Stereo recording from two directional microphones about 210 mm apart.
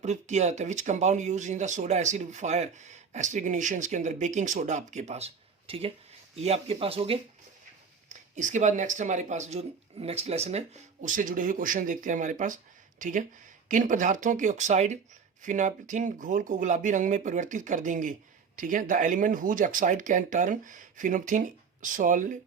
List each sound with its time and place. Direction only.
0.0 s speech: 35° right (ahead or behind)